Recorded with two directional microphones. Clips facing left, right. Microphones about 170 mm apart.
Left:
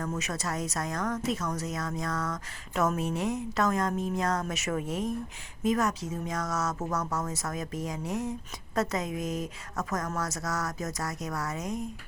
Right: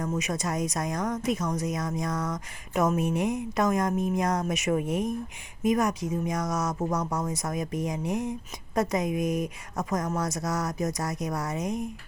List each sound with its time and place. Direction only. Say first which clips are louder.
0.0 s speech: right 4 dB; 15° right (ahead or behind)